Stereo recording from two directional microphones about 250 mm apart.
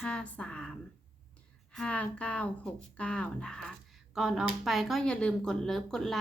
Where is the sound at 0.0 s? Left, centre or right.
Centre.